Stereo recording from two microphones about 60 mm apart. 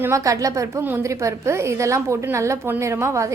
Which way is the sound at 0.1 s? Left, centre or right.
Right.